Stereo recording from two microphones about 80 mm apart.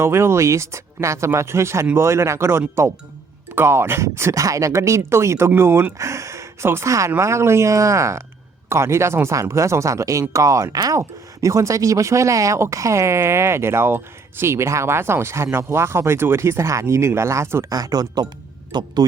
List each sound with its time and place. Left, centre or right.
0.0 s speech: right
17.7 s speech: right
18.7 s speech: right